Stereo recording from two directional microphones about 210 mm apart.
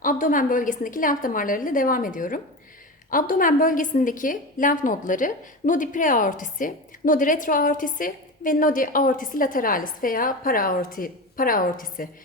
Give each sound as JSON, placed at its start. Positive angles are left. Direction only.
{"t": 0.0, "sound": "a woman's voice", "side_deg": 40}